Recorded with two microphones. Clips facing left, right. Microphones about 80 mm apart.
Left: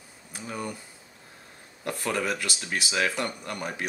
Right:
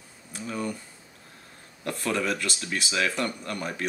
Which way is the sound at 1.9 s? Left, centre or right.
Left.